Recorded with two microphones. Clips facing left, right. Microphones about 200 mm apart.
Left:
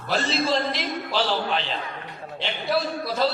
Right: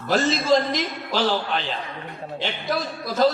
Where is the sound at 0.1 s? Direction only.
45° right (ahead or behind).